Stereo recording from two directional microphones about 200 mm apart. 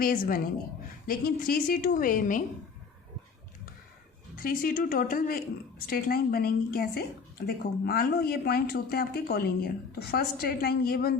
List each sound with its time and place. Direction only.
0.0 s a woman's voice: 45° left (ahead or behind)
4.4 s a woman's voice: 45° left (ahead or behind)